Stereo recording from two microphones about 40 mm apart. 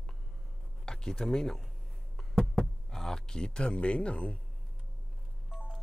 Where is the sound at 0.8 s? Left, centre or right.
Centre.